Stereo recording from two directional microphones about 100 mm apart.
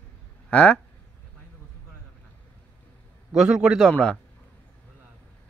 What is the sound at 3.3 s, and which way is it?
Speech, 10° right (ahead or behind).